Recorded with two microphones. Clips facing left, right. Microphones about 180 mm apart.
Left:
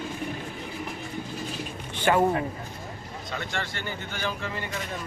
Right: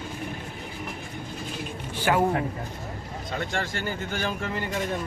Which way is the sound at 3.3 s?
45° right (ahead or behind).